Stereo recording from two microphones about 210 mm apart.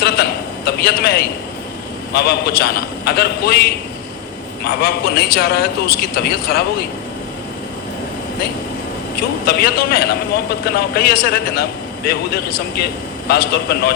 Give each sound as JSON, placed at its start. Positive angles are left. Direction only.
{"t": 0.0, "sound": "a sound", "side_deg": 50}
{"t": 2.1, "sound": "a man's voice", "side_deg": 50}
{"t": 9.5, "sound": "a man's voice", "side_deg": 50}